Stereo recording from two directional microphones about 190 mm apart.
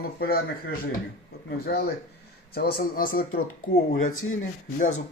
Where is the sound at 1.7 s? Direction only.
55° left (ahead or behind).